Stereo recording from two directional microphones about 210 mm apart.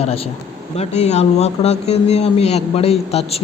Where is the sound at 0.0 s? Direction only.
30° left (ahead or behind).